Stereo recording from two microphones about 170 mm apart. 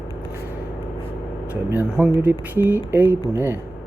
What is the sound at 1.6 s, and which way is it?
Speech, 15° right (ahead or behind).